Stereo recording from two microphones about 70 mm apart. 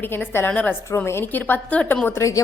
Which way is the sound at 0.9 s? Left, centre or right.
Left.